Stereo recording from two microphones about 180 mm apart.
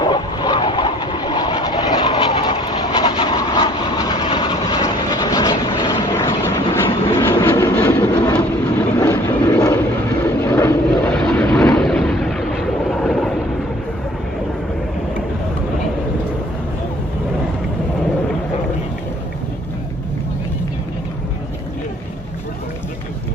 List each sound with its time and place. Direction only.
0.0 s train: 25° left (ahead or behind)
8.8 s vehicle: 10° left (ahead or behind)